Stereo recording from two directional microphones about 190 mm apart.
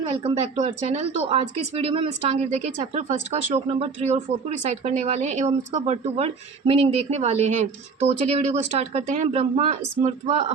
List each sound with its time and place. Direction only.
0.0 s speech: 30° right (ahead or behind)
3.5 s speech: 35° right (ahead or behind)